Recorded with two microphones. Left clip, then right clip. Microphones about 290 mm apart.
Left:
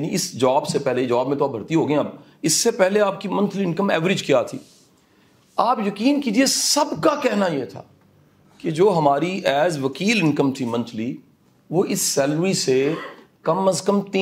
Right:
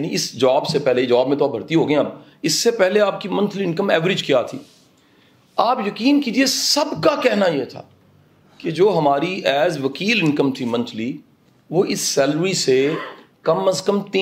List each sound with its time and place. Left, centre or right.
0.0 s speech: left
5.6 s speech: left